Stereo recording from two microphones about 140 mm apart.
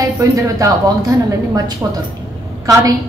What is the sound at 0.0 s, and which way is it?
A woman's voice, 25° right (ahead or behind).